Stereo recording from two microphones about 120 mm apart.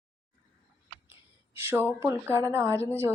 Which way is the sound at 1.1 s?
20° right (ahead or behind).